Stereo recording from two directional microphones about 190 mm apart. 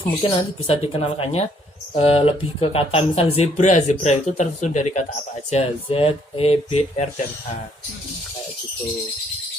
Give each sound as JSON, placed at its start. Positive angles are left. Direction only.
{"t": 0.2, "sound": "speech", "side_deg": 30}